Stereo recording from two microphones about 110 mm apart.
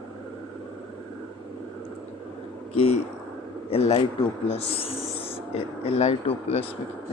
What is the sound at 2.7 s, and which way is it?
A man's voice, 65° left (ahead or behind).